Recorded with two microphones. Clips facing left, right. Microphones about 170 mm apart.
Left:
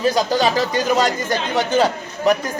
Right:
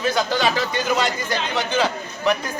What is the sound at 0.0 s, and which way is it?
A man's voice, 35° left (ahead or behind).